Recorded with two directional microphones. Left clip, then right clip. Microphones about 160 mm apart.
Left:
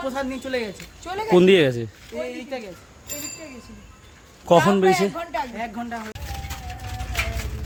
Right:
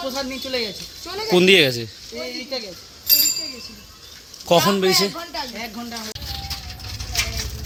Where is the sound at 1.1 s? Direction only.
15° left (ahead or behind).